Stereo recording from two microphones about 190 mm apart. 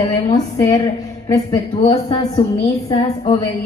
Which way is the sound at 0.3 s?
20° left (ahead or behind).